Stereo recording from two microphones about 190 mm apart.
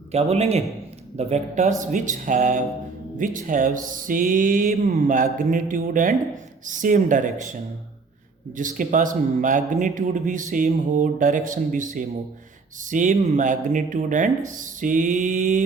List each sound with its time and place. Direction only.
0.1 s speech: 35° right (ahead or behind)
8.5 s speech: 40° right (ahead or behind)